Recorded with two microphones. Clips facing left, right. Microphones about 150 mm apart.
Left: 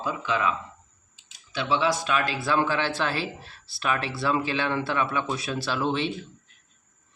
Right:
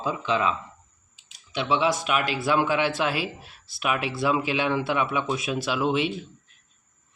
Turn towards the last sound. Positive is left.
turn(degrees=-10)  # may be behind; listen again after turning